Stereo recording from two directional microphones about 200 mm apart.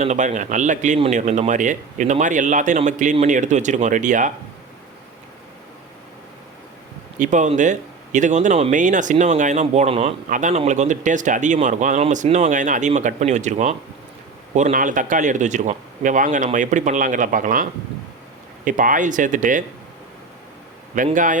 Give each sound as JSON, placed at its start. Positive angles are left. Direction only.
{"t": 0.0, "sound": "speech", "side_deg": -35}
{"t": 7.2, "sound": "speech", "side_deg": -40}
{"t": 20.9, "sound": "speech", "side_deg": -40}